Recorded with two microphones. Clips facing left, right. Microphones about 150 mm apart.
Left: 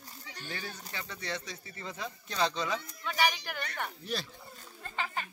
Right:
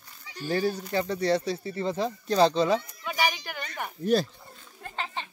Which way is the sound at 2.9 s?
10° right (ahead or behind).